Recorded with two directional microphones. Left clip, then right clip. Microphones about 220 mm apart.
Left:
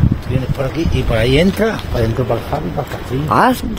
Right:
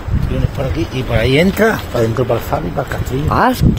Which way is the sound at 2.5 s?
45° right (ahead or behind).